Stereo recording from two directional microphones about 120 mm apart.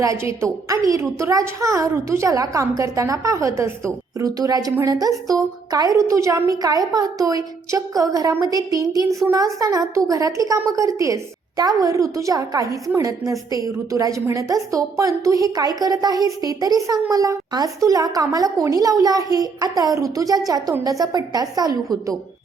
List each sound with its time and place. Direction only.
0.0 s a woman's voice: 25° right (ahead or behind)